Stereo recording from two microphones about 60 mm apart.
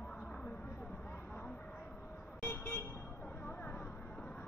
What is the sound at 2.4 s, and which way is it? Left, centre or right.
Vehicle, left.